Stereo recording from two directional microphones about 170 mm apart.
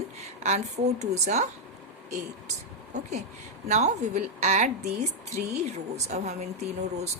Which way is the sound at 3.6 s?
45° right (ahead or behind).